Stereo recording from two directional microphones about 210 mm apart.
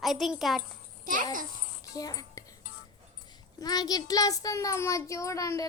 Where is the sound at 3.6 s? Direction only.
20° left (ahead or behind).